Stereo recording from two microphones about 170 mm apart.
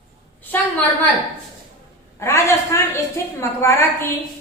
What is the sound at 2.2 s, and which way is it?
A woman's voice, 15° left (ahead or behind).